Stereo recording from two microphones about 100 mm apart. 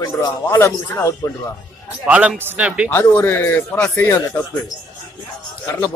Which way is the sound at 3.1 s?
15° left (ahead or behind).